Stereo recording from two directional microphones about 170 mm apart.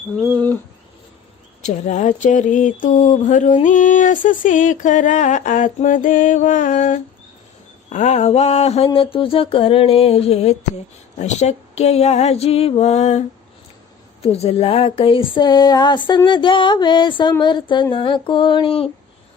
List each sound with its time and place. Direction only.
1.6 s a sound: 45° left (ahead or behind)
7.9 s mantra: 45° left (ahead or behind)
14.2 s speech: 35° left (ahead or behind)